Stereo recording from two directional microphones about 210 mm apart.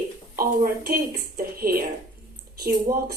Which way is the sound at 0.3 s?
45° right (ahead or behind).